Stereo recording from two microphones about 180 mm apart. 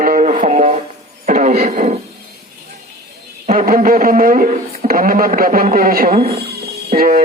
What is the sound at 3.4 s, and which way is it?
Speech, 50° right (ahead or behind).